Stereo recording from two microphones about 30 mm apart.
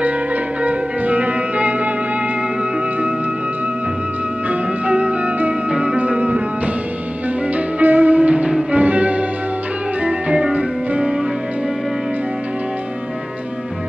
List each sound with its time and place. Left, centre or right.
0.7 s music: right
4.5 s music: right
5.7 s music: right
5.9 s music: right
7.8 s music: right